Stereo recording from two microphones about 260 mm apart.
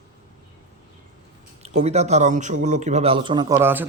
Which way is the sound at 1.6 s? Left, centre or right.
Right.